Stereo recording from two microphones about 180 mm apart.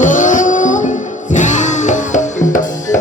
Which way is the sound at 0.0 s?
45° left (ahead or behind).